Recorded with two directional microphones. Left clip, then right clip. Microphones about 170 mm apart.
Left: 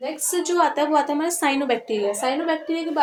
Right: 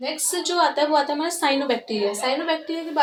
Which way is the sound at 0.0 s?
40° left (ahead or behind).